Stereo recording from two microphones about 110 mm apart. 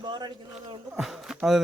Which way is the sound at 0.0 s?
45° right (ahead or behind).